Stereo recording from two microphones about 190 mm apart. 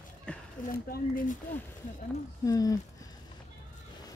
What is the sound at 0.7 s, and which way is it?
Speech, 50° left (ahead or behind).